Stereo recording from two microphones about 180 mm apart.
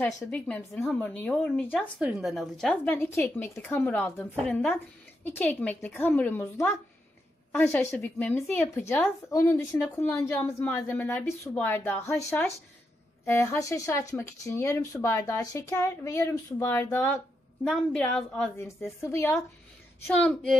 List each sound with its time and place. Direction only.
0.0 s speech: 10° left (ahead or behind)
2.0 s speech: 5° right (ahead or behind); by 17.0 s 15° left (ahead or behind)
17.6 s speech: 5° left (ahead or behind)